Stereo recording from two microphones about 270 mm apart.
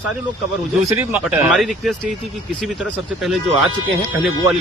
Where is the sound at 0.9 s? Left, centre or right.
Centre.